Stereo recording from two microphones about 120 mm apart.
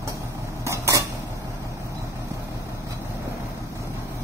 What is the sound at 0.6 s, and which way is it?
Creak, 25° right (ahead or behind).